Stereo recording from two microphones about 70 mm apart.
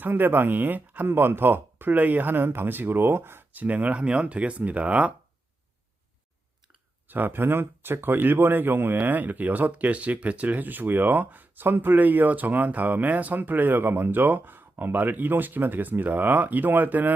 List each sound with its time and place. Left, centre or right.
0.0 s speech: right
3.6 s speech: right
7.1 s speech: right